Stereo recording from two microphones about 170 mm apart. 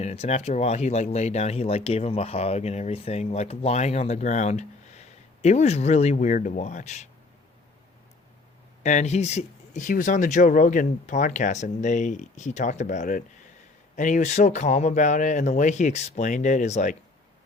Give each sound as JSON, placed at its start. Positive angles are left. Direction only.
{"t": 0.0, "sound": "speech", "side_deg": 40}
{"t": 8.8, "sound": "speech", "side_deg": 45}